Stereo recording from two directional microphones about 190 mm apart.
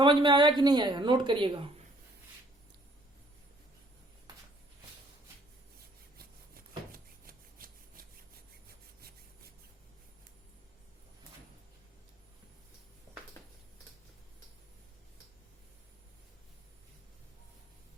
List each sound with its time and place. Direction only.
0.0 s speech: 25° right (ahead or behind)
6.1 s rub: 50° right (ahead or behind)